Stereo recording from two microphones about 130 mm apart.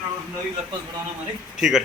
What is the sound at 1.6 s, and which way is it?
Speech, centre (ahead or behind).